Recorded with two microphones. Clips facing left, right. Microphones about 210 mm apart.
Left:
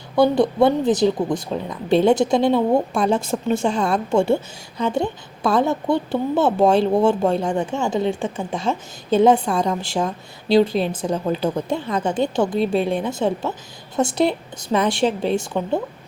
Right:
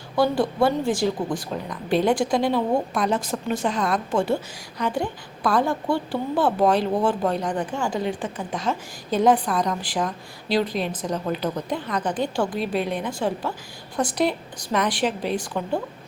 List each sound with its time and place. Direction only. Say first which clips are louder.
0.2 s a woman's voice: left 5 dB; 20° left (ahead or behind)